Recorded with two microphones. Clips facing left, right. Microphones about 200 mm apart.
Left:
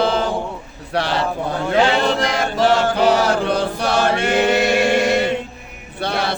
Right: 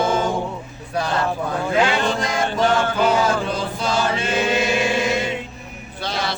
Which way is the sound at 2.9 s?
70° left (ahead or behind).